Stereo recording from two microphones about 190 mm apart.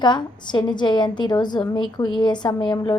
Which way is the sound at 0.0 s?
25° left (ahead or behind).